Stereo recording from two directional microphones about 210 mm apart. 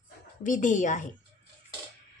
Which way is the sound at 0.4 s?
35° left (ahead or behind).